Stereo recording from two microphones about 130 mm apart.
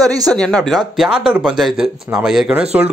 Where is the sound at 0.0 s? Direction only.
30° right (ahead or behind).